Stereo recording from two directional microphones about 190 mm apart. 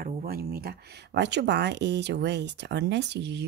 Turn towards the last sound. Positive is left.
turn(degrees=-65)  # may be behind; listen again after turning